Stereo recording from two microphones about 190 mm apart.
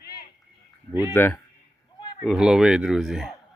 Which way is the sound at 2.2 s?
Centre (ahead or behind).